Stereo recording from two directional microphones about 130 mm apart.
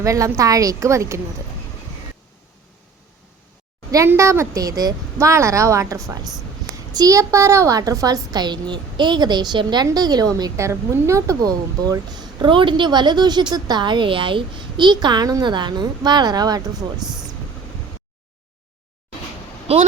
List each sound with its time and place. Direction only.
0.0 s a woman's voice: 25° right (ahead or behind)
3.9 s a woman's voice: 20° right (ahead or behind)
17.0 s speech: 5° right (ahead or behind)